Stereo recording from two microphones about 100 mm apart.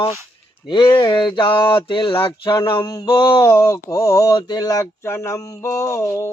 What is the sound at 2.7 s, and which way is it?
Mantra, 55° left (ahead or behind).